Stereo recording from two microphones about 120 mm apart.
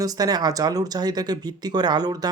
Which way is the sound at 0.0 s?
30° right (ahead or behind).